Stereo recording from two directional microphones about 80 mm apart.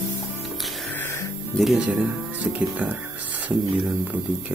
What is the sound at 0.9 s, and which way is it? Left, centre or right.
Music, left.